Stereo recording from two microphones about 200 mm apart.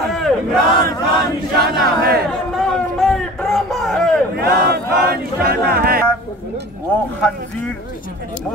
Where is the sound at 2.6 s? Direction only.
Centre (ahead or behind).